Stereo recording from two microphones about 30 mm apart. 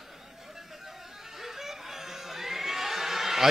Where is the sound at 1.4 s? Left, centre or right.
Centre.